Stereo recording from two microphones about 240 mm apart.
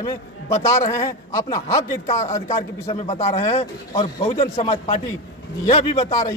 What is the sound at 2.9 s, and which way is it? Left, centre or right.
Speech, left.